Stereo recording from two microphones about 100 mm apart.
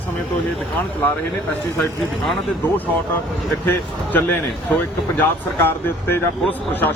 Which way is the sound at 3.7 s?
15° left (ahead or behind).